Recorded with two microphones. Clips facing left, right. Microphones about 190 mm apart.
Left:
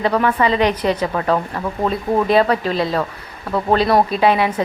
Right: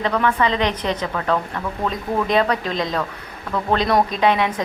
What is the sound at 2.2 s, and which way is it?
Speech, 5° left (ahead or behind).